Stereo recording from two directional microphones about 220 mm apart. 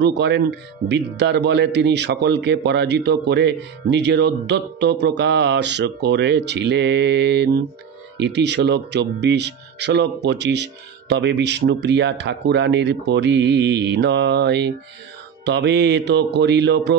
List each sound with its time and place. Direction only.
0.0 s speech: 50° right (ahead or behind)